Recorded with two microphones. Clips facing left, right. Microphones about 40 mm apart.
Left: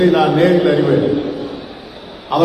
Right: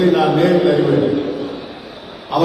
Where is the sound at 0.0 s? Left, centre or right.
Left.